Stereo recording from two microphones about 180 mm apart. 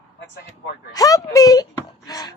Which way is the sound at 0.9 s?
20° left (ahead or behind).